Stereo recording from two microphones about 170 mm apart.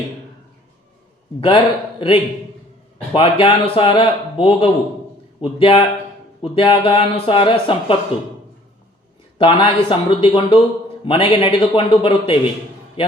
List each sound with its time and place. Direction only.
1.4 s a man's voice: 30° left (ahead or behind)
9.4 s a man's voice: 30° left (ahead or behind)